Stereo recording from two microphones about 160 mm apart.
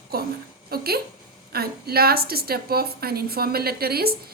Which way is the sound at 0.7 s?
75° right (ahead or behind).